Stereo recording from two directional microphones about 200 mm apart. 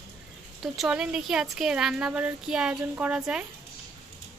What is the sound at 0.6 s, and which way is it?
Speech, centre (ahead or behind).